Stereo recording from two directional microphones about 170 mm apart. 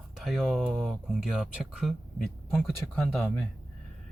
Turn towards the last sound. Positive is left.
turn(degrees=0)  # may be behind; listen again after turning